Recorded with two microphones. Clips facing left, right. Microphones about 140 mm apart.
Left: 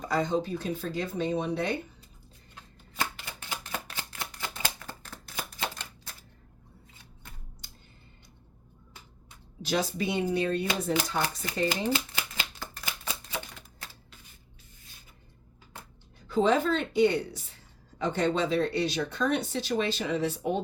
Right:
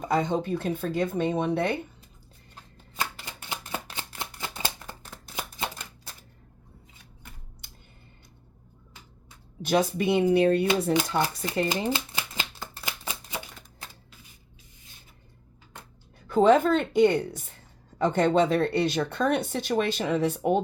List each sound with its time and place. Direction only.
0.1 s a woman's voice: 55° right (ahead or behind)
2.9 s a sound: 20° right (ahead or behind)
9.6 s speech: 55° right (ahead or behind)
11.7 s shuffling cards: 25° right (ahead or behind)
16.3 s a woman's voice: 50° right (ahead or behind)